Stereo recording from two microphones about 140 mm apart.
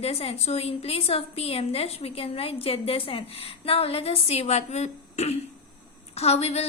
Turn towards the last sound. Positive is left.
turn(degrees=50)  # may be behind; listen again after turning